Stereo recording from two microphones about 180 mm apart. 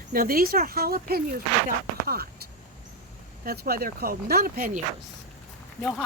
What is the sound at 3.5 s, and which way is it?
Speech, 55° right (ahead or behind).